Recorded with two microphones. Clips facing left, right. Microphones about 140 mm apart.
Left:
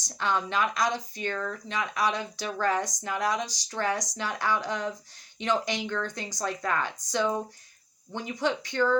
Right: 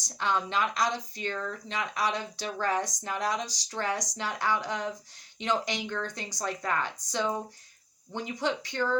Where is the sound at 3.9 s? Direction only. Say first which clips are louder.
Left 1 dB; 25° left (ahead or behind).